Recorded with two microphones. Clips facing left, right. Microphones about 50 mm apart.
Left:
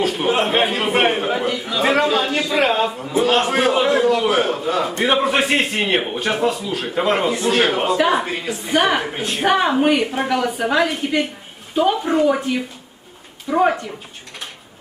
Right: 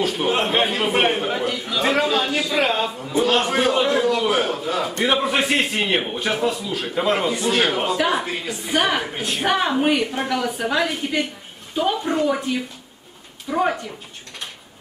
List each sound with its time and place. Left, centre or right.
0.0 s a man's voice: centre